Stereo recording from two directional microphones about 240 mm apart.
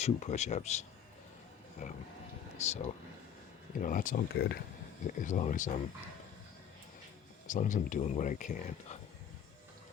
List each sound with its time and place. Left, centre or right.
0.0 s a man's voice: left
3.8 s speech: left
7.4 s speech: left